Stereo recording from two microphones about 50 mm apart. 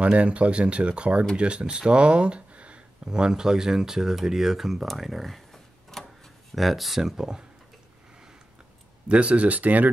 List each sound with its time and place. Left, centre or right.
0.0 s speech: right
3.1 s speech: centre
9.1 s speech: right